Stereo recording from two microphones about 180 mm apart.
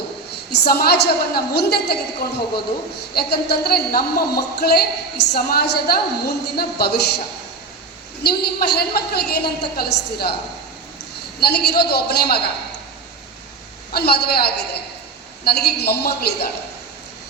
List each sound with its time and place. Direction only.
0.3 s a woman's voice: 60° left (ahead or behind)
8.2 s a woman's voice: 65° left (ahead or behind)
11.3 s a woman's voice: 60° left (ahead or behind)
13.9 s a woman's voice: 60° left (ahead or behind)